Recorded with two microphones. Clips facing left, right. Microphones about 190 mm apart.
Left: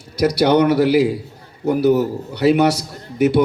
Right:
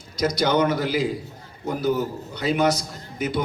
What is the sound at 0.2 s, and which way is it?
A man's voice, 70° left (ahead or behind).